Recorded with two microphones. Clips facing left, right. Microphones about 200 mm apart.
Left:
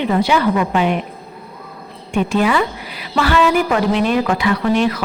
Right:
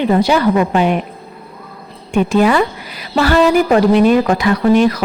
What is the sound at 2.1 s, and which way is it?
A woman's voice, 45° right (ahead or behind).